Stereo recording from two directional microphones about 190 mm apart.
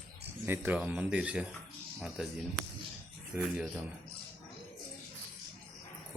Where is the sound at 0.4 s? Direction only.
10° right (ahead or behind).